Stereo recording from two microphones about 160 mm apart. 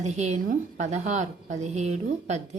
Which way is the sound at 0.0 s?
45° right (ahead or behind).